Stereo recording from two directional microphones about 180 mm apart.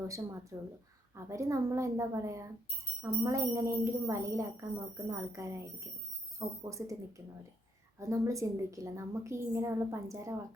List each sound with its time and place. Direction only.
0.1 s a woman's voice: 15° right (ahead or behind)